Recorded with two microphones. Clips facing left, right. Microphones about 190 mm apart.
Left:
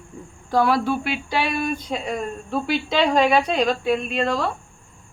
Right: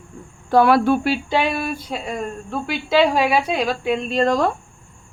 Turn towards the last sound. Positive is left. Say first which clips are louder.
# right 5 dB
turn(degrees=-45)  # may be behind; listen again after turning